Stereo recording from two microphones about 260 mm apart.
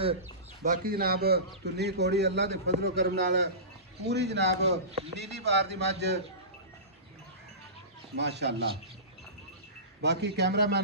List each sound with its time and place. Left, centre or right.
0.6 s a man's voice: right
8.2 s a man's voice: right
10.0 s a man's voice: right